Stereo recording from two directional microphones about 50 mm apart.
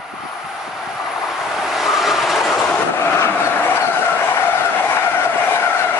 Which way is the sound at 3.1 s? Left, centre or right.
Left.